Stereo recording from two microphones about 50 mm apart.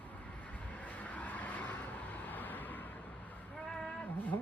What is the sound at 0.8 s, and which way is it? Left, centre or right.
Vehicle, left.